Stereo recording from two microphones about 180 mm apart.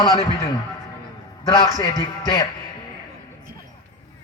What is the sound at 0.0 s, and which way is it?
Music, 25° left (ahead or behind).